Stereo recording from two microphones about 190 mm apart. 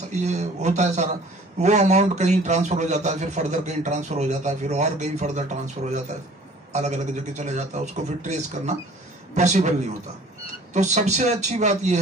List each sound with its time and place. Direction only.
0.1 s a man's voice: 40° right (ahead or behind)